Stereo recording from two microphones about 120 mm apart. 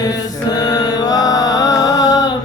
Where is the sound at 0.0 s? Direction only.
30° left (ahead or behind).